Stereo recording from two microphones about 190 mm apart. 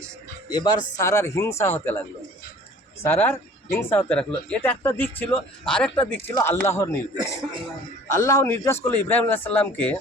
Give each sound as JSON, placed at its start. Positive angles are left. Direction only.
{"t": 0.5, "sound": "speech", "side_deg": 25}
{"t": 3.0, "sound": "speech", "side_deg": 10}